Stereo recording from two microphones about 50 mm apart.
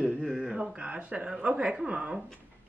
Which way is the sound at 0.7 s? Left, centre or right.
Right.